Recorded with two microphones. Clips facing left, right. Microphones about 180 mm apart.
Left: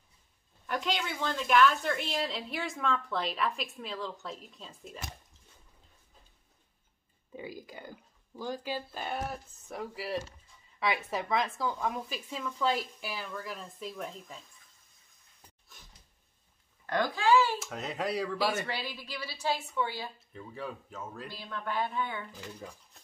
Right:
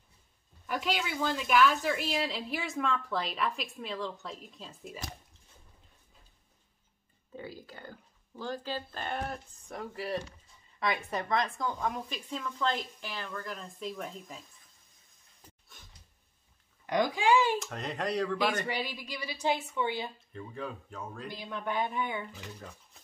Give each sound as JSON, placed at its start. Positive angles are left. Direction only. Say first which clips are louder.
{"t": 0.7, "sound": "a woman's voice", "louder": "even", "side_deg": -5}
{"t": 7.3, "sound": "a woman's voice", "louder": "left 1 dB", "side_deg": 15}
{"t": 16.8, "sound": "a woman's voice", "louder": "right 1 dB", "side_deg": -15}
{"t": 17.6, "sound": "a woman's voice", "louder": "even", "side_deg": 5}
{"t": 18.7, "sound": "a woman's voice", "louder": "right 2 dB", "side_deg": -15}
{"t": 20.3, "sound": "a woman's voice", "louder": "right 1 dB", "side_deg": 5}
{"t": 21.3, "sound": "a woman's voice", "louder": "right 3 dB", "side_deg": -20}
{"t": 22.3, "sound": "a woman's voice", "louder": "left 2 dB", "side_deg": 5}